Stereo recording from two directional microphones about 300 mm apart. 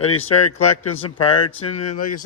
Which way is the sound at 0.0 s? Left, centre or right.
Left.